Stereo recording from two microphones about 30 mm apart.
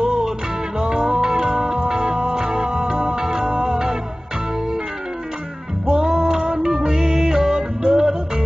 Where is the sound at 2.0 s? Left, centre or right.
Right.